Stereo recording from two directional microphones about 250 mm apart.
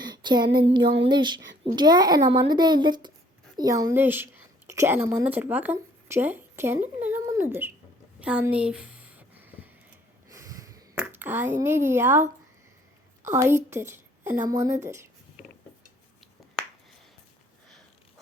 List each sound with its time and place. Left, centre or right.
0.0 s child singing: centre
1.0 s a woman's voice: centre
8.2 s a sound: centre
13.2 s speech: centre